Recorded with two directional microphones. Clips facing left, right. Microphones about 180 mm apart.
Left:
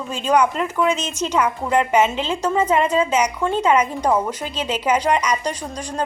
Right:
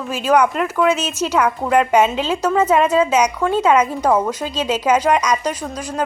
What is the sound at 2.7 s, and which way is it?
A woman's voice, 10° right (ahead or behind).